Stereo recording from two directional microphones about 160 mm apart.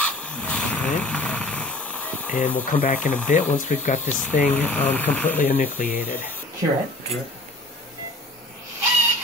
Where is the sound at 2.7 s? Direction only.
55° left (ahead or behind).